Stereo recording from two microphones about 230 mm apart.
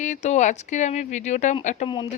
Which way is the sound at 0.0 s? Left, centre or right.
Left.